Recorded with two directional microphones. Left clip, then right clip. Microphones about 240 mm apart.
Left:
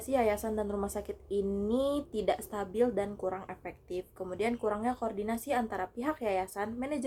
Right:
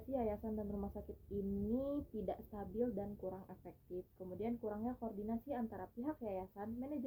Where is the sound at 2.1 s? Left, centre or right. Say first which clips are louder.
Left 13 dB; centre.